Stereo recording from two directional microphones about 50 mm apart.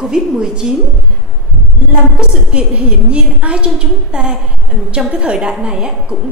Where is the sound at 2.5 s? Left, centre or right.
Centre.